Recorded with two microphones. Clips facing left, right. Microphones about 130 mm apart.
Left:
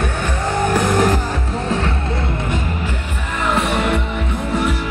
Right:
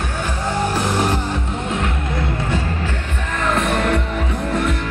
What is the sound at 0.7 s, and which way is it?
Music, 50° left (ahead or behind).